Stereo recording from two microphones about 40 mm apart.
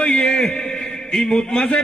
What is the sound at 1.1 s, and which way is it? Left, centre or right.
Speech, centre.